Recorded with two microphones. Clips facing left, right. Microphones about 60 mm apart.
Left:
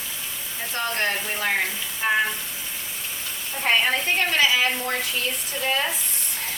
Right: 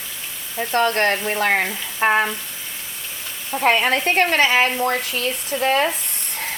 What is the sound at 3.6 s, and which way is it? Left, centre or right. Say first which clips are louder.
Speech: right 4 dB; right.